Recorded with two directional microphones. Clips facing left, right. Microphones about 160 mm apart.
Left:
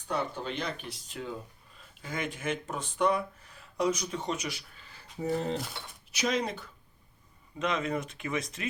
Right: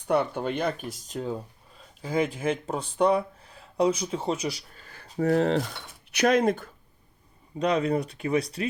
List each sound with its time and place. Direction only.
0.1 s speech: 55° right (ahead or behind)
5.2 s speech: 85° right
6.1 s speech: 60° right (ahead or behind)
7.6 s speech: 35° right (ahead or behind)